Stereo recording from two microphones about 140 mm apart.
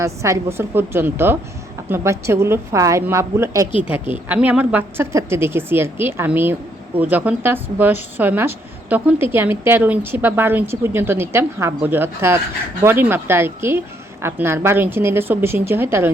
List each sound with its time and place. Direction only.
0.0 s a woman's voice: 20° right (ahead or behind)